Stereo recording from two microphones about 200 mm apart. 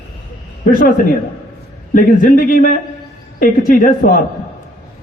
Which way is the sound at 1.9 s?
45° left (ahead or behind).